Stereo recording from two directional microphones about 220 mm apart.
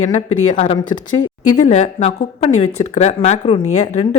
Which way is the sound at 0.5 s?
25° left (ahead or behind).